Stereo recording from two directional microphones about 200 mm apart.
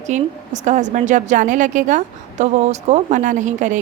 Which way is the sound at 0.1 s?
35° right (ahead or behind).